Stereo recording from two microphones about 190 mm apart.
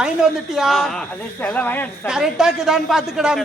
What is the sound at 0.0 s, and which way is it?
A man's voice, centre (ahead or behind).